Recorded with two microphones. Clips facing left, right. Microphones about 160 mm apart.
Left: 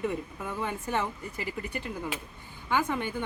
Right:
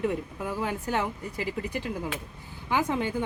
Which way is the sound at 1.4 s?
90° right.